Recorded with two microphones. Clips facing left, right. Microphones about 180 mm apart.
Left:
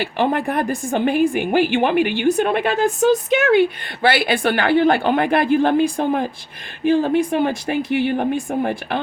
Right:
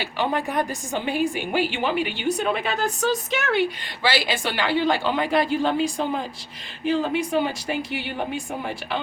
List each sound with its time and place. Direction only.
0.0 s a woman's voice: 55° left (ahead or behind)